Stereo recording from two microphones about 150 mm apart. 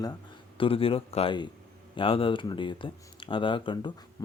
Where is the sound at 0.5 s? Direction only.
35° left (ahead or behind).